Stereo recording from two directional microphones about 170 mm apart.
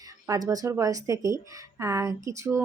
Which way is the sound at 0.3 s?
20° right (ahead or behind).